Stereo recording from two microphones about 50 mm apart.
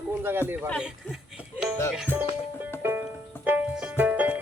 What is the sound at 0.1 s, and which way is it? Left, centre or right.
Speech, right.